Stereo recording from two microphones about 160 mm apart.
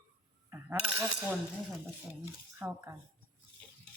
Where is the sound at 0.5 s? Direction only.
15° right (ahead or behind).